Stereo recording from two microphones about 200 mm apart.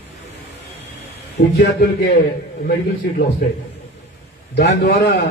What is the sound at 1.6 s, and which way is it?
Speech, 50° left (ahead or behind).